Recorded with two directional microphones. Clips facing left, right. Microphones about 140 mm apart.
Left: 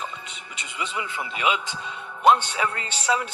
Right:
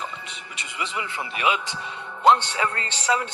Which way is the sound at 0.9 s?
15° left (ahead or behind).